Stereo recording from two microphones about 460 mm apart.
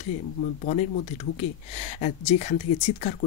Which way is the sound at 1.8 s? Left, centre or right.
Centre.